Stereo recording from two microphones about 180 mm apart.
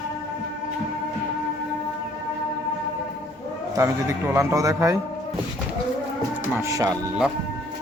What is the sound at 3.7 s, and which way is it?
A man's voice, 15° right (ahead or behind).